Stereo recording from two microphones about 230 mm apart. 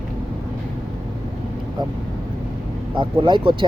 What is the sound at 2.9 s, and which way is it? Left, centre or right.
Speech, right.